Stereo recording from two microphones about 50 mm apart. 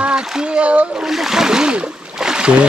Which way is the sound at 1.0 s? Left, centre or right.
Centre.